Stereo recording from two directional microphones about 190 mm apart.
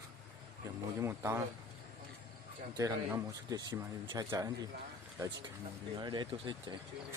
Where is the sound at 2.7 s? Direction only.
20° right (ahead or behind).